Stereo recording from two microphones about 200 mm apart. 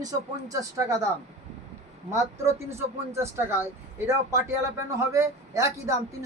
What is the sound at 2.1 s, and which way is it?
Speech, 15° right (ahead or behind).